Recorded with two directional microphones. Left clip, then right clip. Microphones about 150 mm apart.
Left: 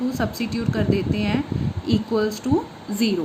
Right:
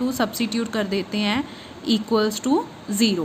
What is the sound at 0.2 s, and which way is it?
A woman's voice, 50° right (ahead or behind).